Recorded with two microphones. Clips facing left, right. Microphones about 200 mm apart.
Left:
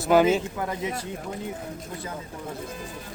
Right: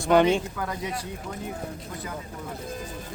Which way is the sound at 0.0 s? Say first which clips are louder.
Left 1 dB; 5° left (ahead or behind).